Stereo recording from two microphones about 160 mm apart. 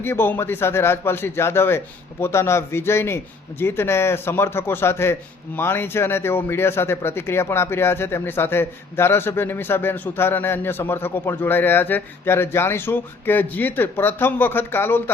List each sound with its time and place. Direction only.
0.0 s speech: 15° left (ahead or behind)